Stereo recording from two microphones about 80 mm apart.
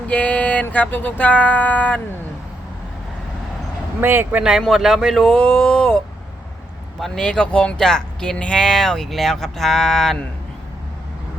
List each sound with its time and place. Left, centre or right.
0.1 s speech: centre
4.0 s a man's voice: right
4.4 s speech: centre
7.0 s speech: centre